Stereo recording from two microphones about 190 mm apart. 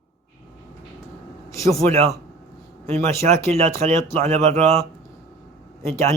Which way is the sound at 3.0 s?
15° left (ahead or behind).